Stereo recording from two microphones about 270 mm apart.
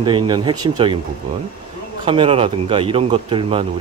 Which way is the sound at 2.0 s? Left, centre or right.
Centre.